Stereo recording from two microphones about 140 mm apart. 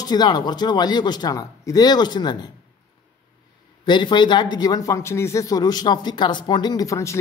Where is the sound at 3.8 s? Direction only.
35° left (ahead or behind).